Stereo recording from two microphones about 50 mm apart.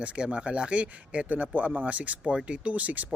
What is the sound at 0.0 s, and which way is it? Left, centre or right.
A man's voice, right.